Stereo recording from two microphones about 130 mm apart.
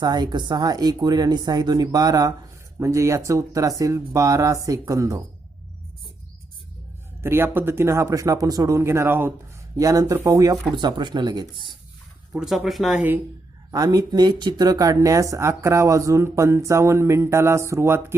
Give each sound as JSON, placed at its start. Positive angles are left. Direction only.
{"t": 0.0, "sound": "speech", "side_deg": -30}
{"t": 7.2, "sound": "speech", "side_deg": -20}
{"t": 9.7, "sound": "speech", "side_deg": -25}
{"t": 12.3, "sound": "speech", "side_deg": -5}
{"t": 13.7, "sound": "speech", "side_deg": -30}